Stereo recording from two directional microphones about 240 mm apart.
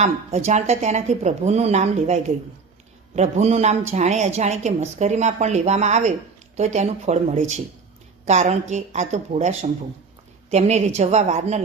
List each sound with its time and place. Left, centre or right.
0.0 s a woman's voice: right